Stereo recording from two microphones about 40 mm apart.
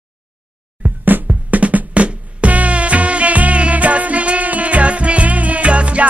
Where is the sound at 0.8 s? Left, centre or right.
Right.